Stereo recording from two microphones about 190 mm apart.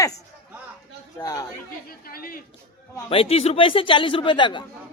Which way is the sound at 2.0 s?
50° left (ahead or behind).